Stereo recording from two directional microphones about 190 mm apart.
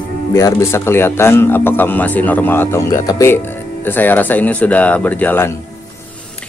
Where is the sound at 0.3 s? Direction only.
20° left (ahead or behind).